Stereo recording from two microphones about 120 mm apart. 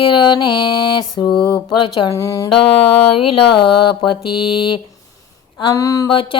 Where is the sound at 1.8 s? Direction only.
45° left (ahead or behind).